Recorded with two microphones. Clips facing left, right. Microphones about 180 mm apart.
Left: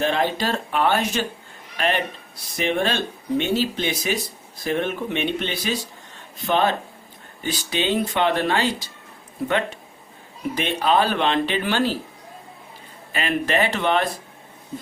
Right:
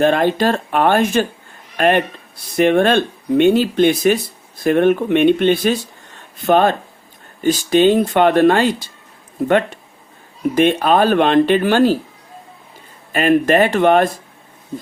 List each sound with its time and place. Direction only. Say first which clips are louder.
0.0 s speech: right 8 dB; 55° right (ahead or behind)
10.5 s speech: right 7 dB; 50° right (ahead or behind)
13.1 s speech: right 9 dB; 50° right (ahead or behind)